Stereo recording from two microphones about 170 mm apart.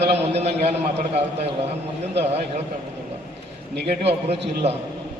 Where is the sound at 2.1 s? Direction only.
40° right (ahead or behind).